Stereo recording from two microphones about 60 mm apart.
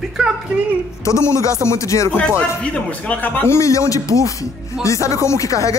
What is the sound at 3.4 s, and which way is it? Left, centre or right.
Speech, left.